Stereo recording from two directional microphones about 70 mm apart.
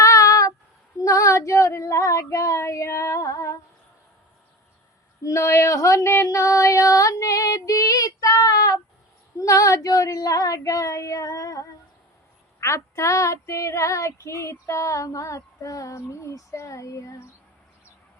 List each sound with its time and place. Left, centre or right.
0.0 s child singing: left
0.9 s female singing: left
5.2 s child singing: left
6.2 s female singing: left
9.4 s child singing: left